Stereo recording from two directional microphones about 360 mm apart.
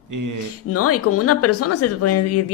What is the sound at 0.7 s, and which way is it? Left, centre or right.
Speech, left.